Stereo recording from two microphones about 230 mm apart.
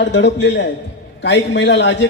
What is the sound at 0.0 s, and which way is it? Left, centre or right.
Speech, left.